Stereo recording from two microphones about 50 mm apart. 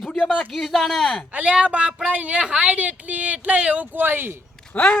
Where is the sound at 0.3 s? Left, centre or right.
Centre.